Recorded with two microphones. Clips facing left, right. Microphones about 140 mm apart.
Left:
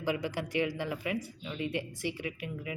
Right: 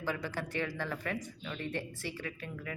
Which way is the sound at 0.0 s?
15° left (ahead or behind).